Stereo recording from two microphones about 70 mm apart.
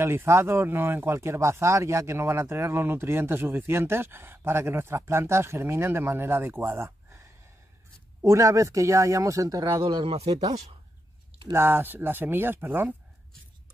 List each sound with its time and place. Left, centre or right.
0.0 s speech: right
8.2 s speech: right
11.5 s speech: right